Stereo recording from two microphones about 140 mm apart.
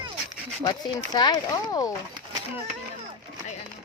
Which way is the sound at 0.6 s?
30° left (ahead or behind).